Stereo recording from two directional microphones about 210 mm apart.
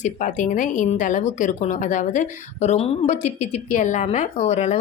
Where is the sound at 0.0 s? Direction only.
35° left (ahead or behind).